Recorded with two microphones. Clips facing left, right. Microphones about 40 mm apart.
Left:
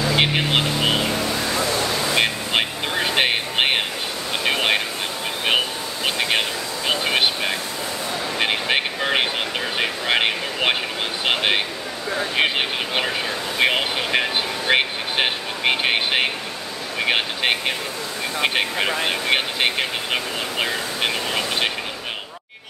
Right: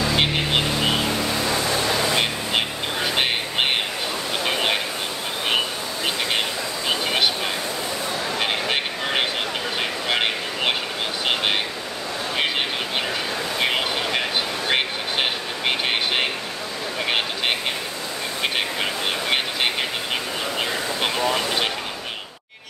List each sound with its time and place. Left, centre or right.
0.1 s vehicle: centre
1.2 s vehicle: centre
2.1 s vehicle: centre
6.0 s vehicle: centre